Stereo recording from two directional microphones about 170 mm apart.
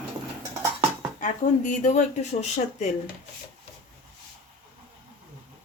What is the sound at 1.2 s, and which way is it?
Speech, 45° left (ahead or behind).